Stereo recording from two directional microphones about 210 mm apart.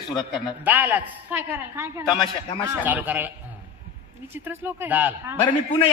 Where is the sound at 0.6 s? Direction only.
10° right (ahead or behind).